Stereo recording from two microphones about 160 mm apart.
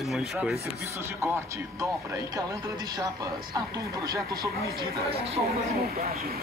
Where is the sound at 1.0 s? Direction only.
15° right (ahead or behind).